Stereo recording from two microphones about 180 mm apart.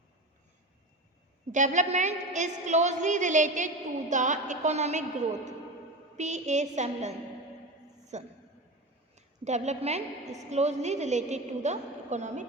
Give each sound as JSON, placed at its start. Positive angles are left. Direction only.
{"t": 1.5, "sound": "a woman's voice", "side_deg": -40}
{"t": 8.1, "sound": "a woman's voice", "side_deg": -40}